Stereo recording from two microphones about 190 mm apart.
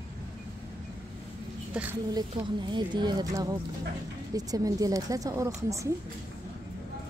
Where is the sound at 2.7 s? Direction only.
25° right (ahead or behind).